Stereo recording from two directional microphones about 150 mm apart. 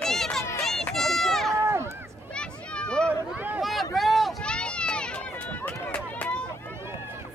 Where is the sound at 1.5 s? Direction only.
20° right (ahead or behind).